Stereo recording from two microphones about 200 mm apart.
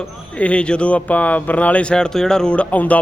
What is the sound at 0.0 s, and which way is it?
Speech, 5° left (ahead or behind).